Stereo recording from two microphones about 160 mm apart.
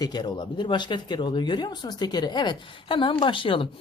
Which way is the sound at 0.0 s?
25° left (ahead or behind).